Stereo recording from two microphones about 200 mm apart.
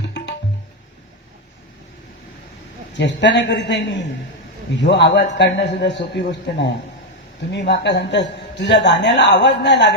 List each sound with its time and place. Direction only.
0.1 s music: 60° left (ahead or behind)
3.0 s a man's voice: 60° left (ahead or behind)